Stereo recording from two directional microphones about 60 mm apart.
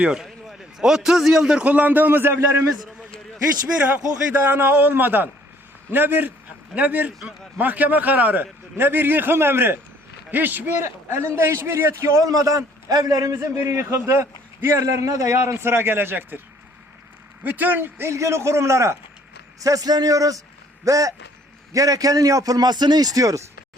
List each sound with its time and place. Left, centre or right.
0.0 s a man's voice: centre
1.5 s speech: right
3.9 s a man's voice: right
11.3 s a man's voice: right
13.3 s a man's voice: right
14.8 s a man's voice: right
15.6 s a man's voice: right
17.4 s a man's voice: right
18.1 s a man's voice: right
19.5 s a man's voice: right